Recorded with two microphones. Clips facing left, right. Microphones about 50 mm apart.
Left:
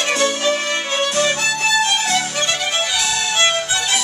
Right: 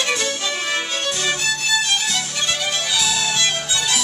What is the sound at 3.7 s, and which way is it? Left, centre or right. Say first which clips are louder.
Music: left 2 dB; left.